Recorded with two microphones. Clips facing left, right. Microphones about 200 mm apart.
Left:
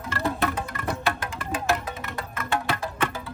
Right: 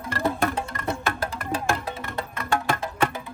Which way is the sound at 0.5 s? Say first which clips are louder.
Right 1 dB; 30° right (ahead or behind).